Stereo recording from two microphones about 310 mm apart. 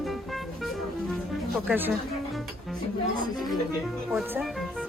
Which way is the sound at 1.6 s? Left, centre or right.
Centre.